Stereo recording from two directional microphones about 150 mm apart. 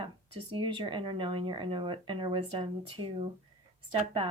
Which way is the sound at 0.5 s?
30° right (ahead or behind).